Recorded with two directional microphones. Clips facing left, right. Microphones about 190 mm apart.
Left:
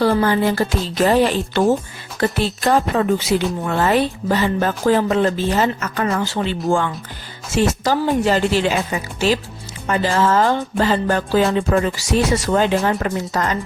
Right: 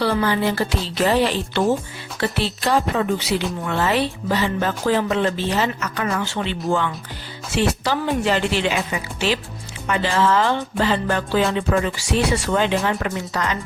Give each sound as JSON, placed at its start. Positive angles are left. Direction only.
{"t": 0.0, "sound": "speech", "side_deg": 45}